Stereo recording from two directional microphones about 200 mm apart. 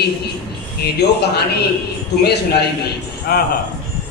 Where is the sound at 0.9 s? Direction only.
55° left (ahead or behind).